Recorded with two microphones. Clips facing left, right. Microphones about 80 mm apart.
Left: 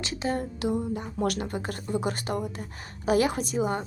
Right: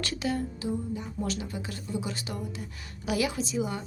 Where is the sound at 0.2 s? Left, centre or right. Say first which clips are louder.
Left 2 dB; left.